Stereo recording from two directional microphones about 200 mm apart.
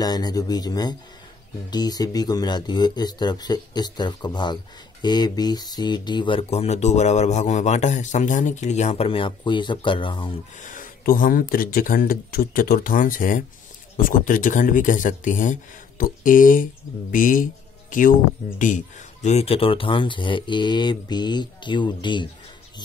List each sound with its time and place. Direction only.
0.0 s speech: 20° left (ahead or behind)
10.6 s speech: 40° left (ahead or behind)
19.2 s speech: 30° left (ahead or behind)